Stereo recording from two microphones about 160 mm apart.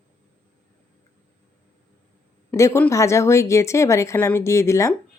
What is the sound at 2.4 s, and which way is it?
Speech, 15° left (ahead or behind).